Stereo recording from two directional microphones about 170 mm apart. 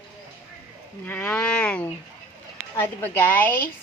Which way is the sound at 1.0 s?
10° left (ahead or behind).